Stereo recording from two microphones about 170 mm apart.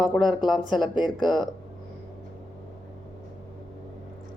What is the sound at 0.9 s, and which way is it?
Speech, 25° left (ahead or behind).